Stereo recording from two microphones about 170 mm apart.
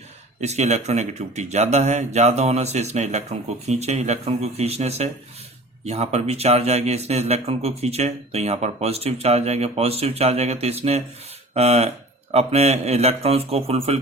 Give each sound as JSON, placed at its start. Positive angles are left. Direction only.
{"t": 0.4, "sound": "speech", "side_deg": -40}